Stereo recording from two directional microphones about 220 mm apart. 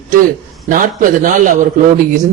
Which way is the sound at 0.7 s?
40° right (ahead or behind).